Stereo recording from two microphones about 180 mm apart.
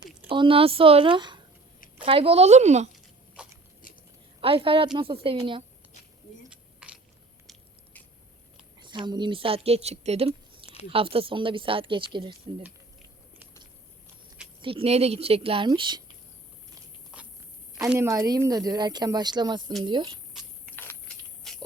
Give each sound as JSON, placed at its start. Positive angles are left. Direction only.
{"t": 0.3, "sound": "speech", "side_deg": -30}
{"t": 3.4, "sound": "biting", "side_deg": -5}
{"t": 3.8, "sound": "a sound", "side_deg": 50}
{"t": 4.4, "sound": "a woman's voice", "side_deg": -30}
{"t": 6.5, "sound": "mechanisms", "side_deg": -5}
{"t": 8.8, "sound": "speech", "side_deg": -25}
{"t": 14.6, "sound": "speech", "side_deg": -30}
{"t": 17.1, "sound": "a sound", "side_deg": -5}
{"t": 17.9, "sound": "speech", "side_deg": -15}
{"t": 20.7, "sound": "a sound", "side_deg": -10}
{"t": 21.5, "sound": "walk", "side_deg": 0}